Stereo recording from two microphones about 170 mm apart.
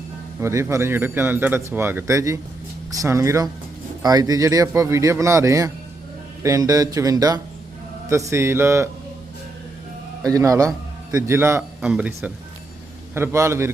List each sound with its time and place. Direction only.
0.3 s speech: 15° right (ahead or behind)
10.2 s a man's voice: 20° right (ahead or behind)